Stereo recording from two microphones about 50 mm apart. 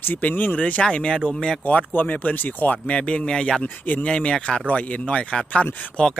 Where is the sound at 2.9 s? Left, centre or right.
Left.